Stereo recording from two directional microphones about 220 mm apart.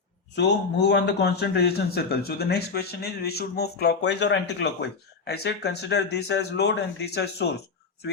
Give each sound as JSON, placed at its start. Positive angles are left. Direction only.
{"t": 0.3, "sound": "speech", "side_deg": 50}